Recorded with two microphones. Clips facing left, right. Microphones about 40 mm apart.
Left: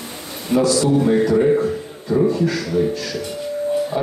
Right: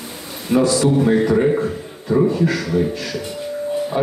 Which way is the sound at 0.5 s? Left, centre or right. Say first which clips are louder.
Right 1 dB; centre.